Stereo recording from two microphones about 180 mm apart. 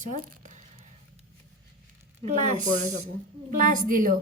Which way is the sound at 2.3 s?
40° right (ahead or behind).